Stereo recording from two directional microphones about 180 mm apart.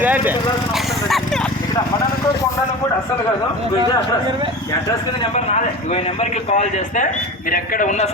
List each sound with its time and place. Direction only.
0.0 s vehicle: 10° right (ahead or behind)
5.3 s a man's voice: 40° left (ahead or behind)